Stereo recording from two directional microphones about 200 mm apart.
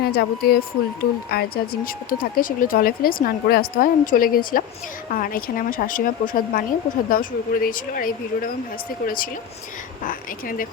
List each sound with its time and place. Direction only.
0.0 s a woman's voice: 50° left (ahead or behind)